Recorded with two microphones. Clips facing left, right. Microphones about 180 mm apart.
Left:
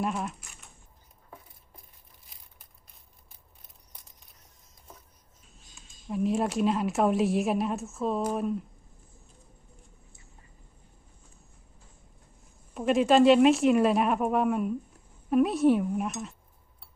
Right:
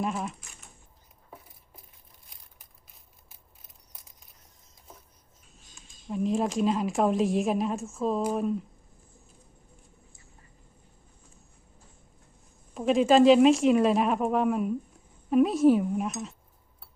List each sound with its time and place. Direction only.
0.0 s a woman's voice: centre (ahead or behind)
2.3 s crushing: centre (ahead or behind)
6.1 s a woman's voice: centre (ahead or behind)
12.7 s a woman's voice: centre (ahead or behind)